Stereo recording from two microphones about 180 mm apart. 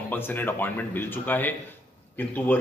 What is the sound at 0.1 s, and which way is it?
A man's voice, 10° left (ahead or behind).